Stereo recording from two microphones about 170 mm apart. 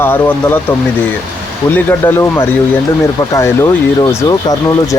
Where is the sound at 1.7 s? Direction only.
10° left (ahead or behind).